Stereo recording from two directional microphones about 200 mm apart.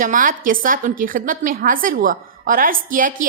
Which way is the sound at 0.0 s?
40° right (ahead or behind).